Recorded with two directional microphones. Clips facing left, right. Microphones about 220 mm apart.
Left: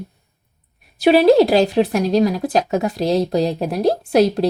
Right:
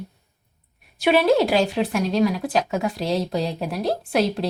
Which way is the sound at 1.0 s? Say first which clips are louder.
Left 6 dB; 35° left (ahead or behind).